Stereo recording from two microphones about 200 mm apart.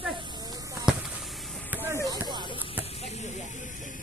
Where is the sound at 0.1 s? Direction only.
20° right (ahead or behind).